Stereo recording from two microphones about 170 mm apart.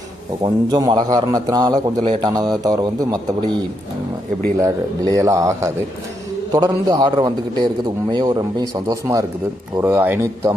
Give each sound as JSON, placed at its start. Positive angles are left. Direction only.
{"t": 0.4, "sound": "a man's voice", "side_deg": -25}
{"t": 4.6, "sound": "a man's voice", "side_deg": -20}